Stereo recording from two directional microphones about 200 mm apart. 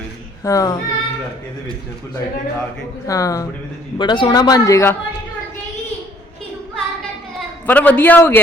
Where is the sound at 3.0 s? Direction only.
15° left (ahead or behind).